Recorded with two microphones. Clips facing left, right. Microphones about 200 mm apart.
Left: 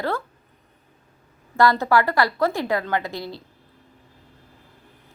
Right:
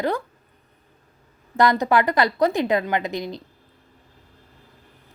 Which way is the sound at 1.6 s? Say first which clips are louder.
Even; 20° right (ahead or behind).